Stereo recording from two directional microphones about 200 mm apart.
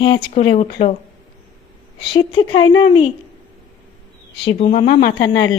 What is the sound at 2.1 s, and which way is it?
Speech, 25° left (ahead or behind).